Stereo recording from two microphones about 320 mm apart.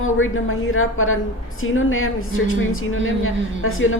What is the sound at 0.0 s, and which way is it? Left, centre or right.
A woman's voice, left.